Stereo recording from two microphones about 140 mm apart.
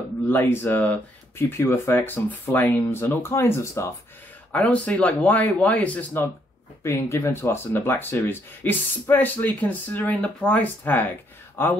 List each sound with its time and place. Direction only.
0.3 s speech: 15° left (ahead or behind)